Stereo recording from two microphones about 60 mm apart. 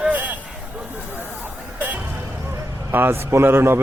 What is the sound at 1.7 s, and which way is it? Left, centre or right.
Music, right.